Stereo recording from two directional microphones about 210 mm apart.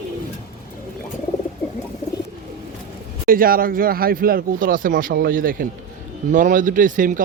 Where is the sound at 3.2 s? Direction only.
45° right (ahead or behind).